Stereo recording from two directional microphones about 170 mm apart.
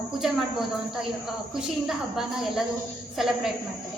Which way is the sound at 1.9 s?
Centre (ahead or behind).